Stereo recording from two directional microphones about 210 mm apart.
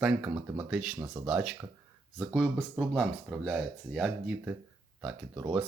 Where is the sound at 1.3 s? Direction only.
5° right (ahead or behind).